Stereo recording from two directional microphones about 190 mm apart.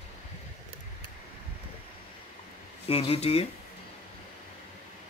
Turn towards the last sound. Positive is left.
turn(degrees=35)  # may be behind; listen again after turning